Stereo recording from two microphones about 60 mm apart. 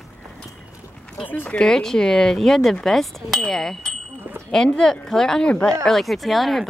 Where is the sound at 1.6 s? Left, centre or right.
Centre.